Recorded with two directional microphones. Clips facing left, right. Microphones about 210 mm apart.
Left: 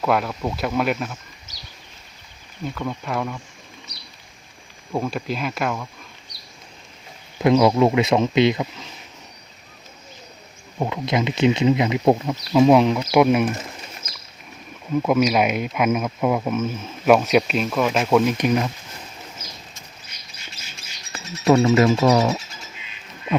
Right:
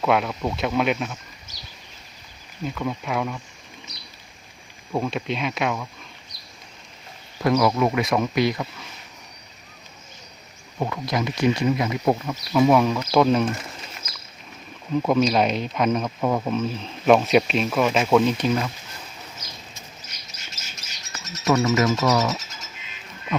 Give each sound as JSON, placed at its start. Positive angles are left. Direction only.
{"t": 0.0, "sound": "speech", "side_deg": 0}
{"t": 2.6, "sound": "speech", "side_deg": 0}
{"t": 4.9, "sound": "speech", "side_deg": 0}
{"t": 7.4, "sound": "speech", "side_deg": 20}
{"t": 10.8, "sound": "speech", "side_deg": 20}
{"t": 15.0, "sound": "speech", "side_deg": 5}
{"t": 20.3, "sound": "bird", "side_deg": -40}
{"t": 21.4, "sound": "speech", "side_deg": 20}